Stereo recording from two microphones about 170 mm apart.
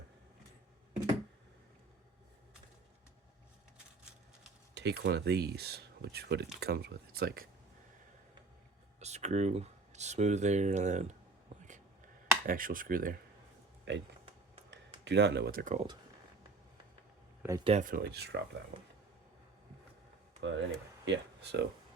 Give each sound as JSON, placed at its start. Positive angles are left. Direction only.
{"t": 4.7, "sound": "speech", "side_deg": -80}
{"t": 9.0, "sound": "speech", "side_deg": -40}
{"t": 11.4, "sound": "a sound", "side_deg": -45}
{"t": 13.9, "sound": "speech", "side_deg": -90}
{"t": 15.0, "sound": "speech", "side_deg": -90}
{"t": 15.6, "sound": "speech", "side_deg": -45}
{"t": 17.6, "sound": "speech", "side_deg": -35}
{"t": 18.0, "sound": "speech", "side_deg": -75}
{"t": 20.4, "sound": "speech", "side_deg": -90}